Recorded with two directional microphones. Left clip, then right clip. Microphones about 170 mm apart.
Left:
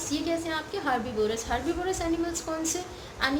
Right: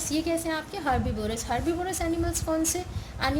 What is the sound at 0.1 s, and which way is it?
A woman's voice, 50° right (ahead or behind).